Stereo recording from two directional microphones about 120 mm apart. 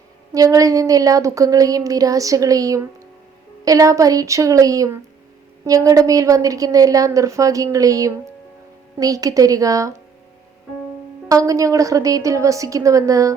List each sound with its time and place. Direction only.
0.3 s speech: 30° right (ahead or behind)
11.3 s speech: 30° right (ahead or behind)